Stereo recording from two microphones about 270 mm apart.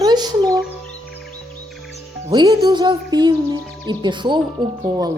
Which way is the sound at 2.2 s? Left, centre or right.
Centre.